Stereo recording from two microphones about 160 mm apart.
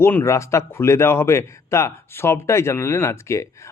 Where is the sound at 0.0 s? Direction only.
15° left (ahead or behind).